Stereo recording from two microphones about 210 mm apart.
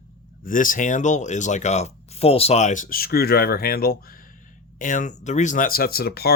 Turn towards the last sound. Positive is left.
turn(degrees=50)  # may be behind; listen again after turning